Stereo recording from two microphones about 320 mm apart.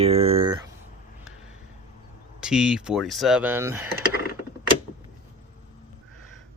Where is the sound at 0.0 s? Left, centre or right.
Centre.